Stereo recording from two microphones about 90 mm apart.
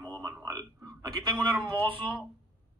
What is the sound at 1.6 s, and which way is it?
Speech, 25° left (ahead or behind).